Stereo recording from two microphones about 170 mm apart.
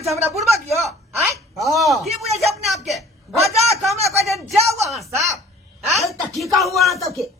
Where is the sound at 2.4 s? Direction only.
Centre (ahead or behind).